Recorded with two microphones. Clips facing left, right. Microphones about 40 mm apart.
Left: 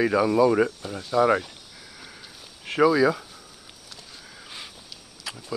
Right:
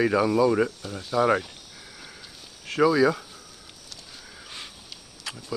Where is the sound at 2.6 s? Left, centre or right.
Centre.